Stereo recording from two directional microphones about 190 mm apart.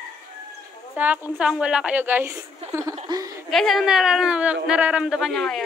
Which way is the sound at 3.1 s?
25° right (ahead or behind).